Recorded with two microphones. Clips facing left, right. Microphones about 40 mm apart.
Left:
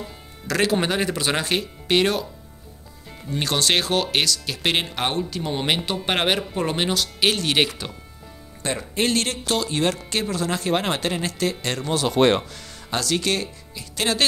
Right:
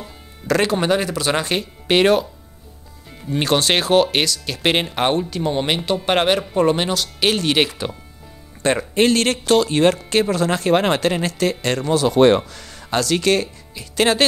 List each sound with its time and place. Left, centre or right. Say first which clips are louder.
0.0 s music: even; centre
0.7 s speech: right 4 dB; centre
1.9 s speech: right 5 dB; right
3.3 s speech: right 5 dB; right
3.7 s speech: right 6 dB; centre
8.6 s speech: right 7 dB; right
10.3 s speech: right 3 dB; right
13.1 s speech: right 6 dB; right